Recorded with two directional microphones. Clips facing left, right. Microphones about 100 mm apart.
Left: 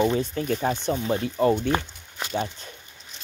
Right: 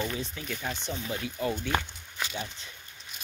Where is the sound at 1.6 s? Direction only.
40° left (ahead or behind).